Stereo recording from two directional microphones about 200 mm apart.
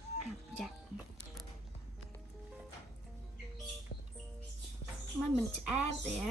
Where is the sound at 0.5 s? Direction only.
Centre (ahead or behind).